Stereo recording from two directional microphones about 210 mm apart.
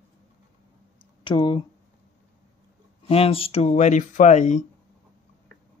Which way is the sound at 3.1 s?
25° left (ahead or behind).